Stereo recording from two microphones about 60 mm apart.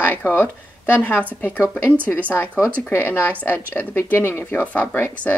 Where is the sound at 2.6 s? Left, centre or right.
Left.